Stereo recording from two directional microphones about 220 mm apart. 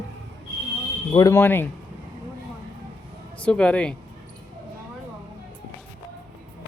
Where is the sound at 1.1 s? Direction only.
15° left (ahead or behind).